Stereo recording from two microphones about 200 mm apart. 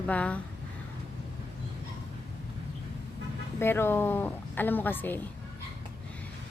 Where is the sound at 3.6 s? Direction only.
10° left (ahead or behind).